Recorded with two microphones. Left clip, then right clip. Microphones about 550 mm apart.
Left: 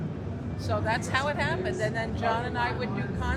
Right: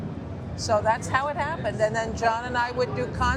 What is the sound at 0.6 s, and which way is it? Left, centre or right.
A woman's voice, right.